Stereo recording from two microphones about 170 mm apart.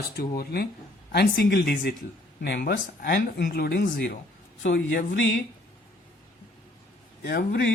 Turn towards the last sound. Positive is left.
turn(degrees=65)  # may be behind; listen again after turning